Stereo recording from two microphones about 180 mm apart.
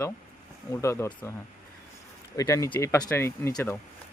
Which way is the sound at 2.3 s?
20° left (ahead or behind).